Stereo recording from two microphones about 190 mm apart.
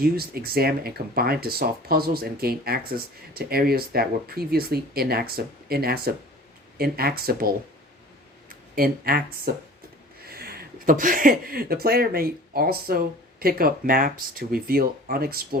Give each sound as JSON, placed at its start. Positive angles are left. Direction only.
{"t": 0.0, "sound": "speech", "side_deg": -50}